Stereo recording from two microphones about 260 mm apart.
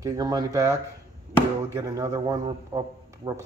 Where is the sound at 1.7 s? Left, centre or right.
Centre.